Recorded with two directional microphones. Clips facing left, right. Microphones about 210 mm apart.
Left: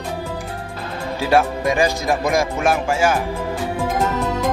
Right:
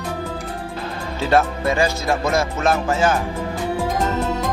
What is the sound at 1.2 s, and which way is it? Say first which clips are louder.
Speech: left 1 dB; 10° left (ahead or behind).